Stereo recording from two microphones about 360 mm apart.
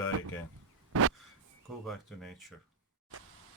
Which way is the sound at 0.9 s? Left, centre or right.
Right.